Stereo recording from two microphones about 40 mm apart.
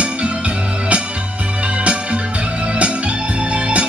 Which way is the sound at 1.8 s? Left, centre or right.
Right.